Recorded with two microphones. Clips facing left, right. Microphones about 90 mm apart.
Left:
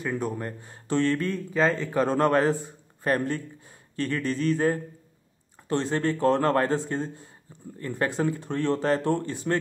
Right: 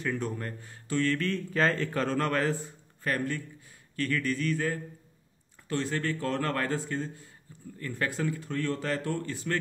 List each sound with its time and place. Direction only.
0.0 s speech: 15° left (ahead or behind)